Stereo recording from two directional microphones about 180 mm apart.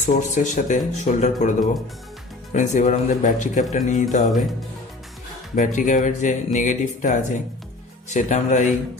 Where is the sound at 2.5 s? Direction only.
45° left (ahead or behind).